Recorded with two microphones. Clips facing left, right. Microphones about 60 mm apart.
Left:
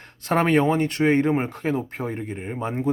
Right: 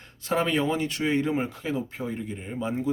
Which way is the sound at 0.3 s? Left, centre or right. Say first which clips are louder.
Left 5 dB; left.